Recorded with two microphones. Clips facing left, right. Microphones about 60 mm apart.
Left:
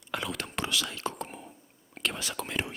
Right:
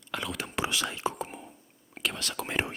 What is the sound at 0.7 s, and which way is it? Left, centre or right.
Speech, right.